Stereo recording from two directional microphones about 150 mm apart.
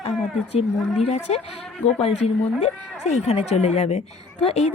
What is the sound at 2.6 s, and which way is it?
Speech, 50° left (ahead or behind).